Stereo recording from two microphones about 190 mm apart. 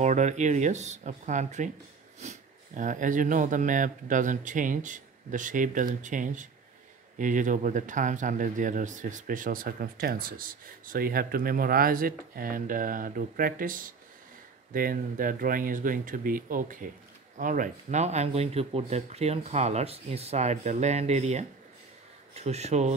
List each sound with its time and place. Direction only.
0.0 s speech: 40° right (ahead or behind)